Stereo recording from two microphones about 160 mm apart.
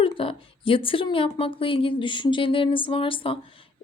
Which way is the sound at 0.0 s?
35° left (ahead or behind).